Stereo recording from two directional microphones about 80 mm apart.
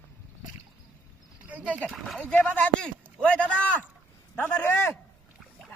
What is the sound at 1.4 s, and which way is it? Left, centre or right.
Wild animals, centre.